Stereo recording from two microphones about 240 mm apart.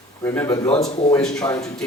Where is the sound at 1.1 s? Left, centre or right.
Centre.